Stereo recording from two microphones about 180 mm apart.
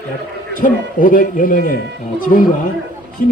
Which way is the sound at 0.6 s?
50° left (ahead or behind).